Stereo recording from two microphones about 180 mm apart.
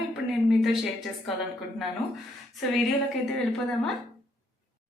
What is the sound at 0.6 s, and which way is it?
Speech, centre (ahead or behind).